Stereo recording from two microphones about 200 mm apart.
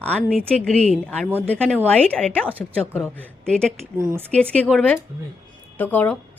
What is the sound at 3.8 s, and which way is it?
Speech, 15° right (ahead or behind).